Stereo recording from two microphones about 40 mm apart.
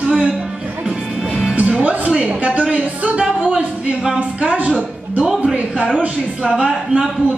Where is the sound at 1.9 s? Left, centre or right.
Right.